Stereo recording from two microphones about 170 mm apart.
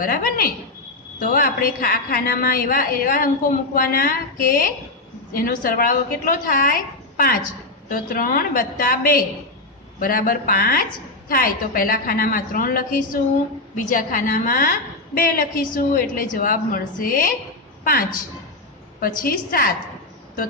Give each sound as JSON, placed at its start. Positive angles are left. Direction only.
{"t": 0.0, "sound": "a woman's voice", "side_deg": 60}
{"t": 18.9, "sound": "a woman's voice", "side_deg": 55}